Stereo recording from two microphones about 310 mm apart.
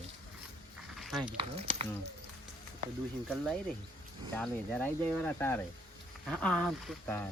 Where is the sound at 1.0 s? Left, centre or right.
Centre.